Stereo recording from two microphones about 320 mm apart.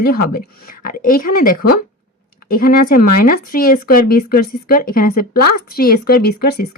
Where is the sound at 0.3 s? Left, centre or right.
Left.